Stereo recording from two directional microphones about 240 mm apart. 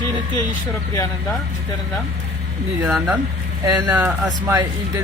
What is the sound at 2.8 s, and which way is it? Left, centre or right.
Speech, centre.